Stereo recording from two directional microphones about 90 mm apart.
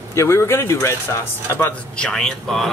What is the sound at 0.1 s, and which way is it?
A man's voice, 30° left (ahead or behind).